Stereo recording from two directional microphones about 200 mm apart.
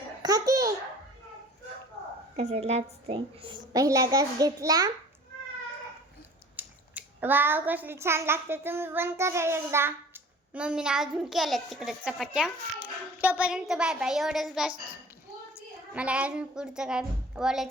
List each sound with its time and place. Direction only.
0.2 s babbling: 20° right (ahead or behind)
2.3 s a woman's voice: 35° right (ahead or behind); by 4.9 s 20° right (ahead or behind)
6.6 s a child's voice: 10° right (ahead or behind)